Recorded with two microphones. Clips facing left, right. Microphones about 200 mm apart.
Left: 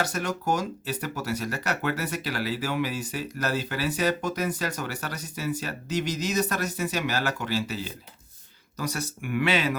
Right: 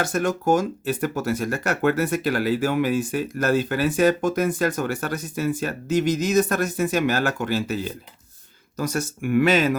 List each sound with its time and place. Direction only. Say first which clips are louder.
0.0 s speech: right 6 dB; 50° right (ahead or behind)